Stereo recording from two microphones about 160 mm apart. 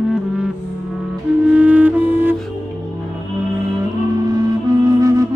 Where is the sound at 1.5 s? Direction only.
10° right (ahead or behind).